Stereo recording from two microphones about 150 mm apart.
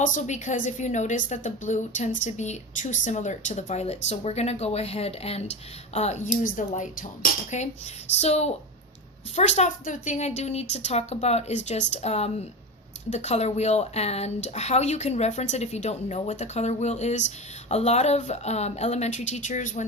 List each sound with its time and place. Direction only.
0.0 s a woman's voice: 55° left (ahead or behind)